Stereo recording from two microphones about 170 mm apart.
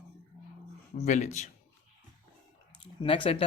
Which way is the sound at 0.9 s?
45° left (ahead or behind).